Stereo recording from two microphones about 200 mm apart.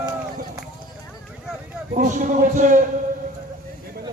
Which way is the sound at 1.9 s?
40° right (ahead or behind).